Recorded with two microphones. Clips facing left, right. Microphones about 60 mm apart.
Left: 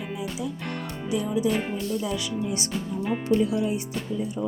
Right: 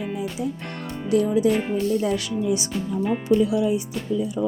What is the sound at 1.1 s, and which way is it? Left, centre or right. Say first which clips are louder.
Speech: right 6 dB; right.